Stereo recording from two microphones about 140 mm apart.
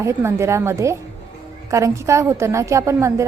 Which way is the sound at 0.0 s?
20° right (ahead or behind).